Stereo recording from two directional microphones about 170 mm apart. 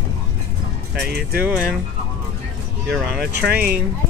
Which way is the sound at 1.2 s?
65° right (ahead or behind).